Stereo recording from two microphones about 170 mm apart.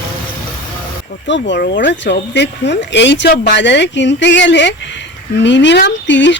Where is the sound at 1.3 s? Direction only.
80° left.